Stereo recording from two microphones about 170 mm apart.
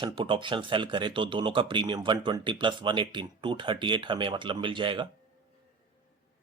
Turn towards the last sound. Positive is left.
turn(degrees=-30)  # may be behind; listen again after turning